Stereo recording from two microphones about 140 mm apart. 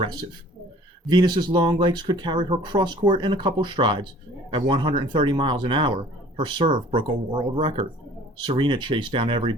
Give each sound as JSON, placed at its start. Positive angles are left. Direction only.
{"t": 1.1, "sound": "speech", "side_deg": -35}